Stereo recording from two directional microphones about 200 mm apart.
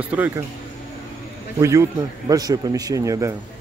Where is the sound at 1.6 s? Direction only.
15° right (ahead or behind).